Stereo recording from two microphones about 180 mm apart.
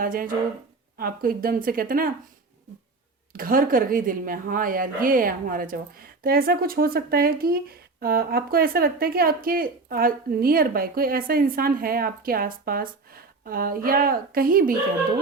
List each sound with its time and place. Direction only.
0.0 s a woman's voice: 50° right (ahead or behind)
3.3 s a woman's voice: 50° right (ahead or behind)